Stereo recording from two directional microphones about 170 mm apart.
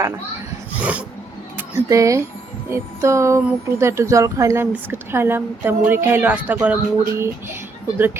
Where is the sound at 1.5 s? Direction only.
20° right (ahead or behind).